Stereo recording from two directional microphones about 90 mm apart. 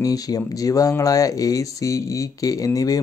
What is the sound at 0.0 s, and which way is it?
Speech, 45° left (ahead or behind).